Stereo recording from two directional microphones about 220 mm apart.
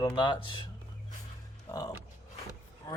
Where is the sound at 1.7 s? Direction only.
15° left (ahead or behind).